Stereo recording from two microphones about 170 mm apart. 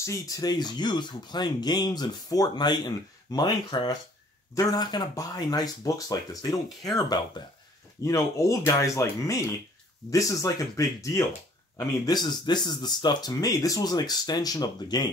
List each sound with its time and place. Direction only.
0.0 s speech: 20° left (ahead or behind)